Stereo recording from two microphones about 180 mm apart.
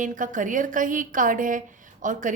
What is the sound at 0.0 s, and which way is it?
A woman's voice, 45° right (ahead or behind).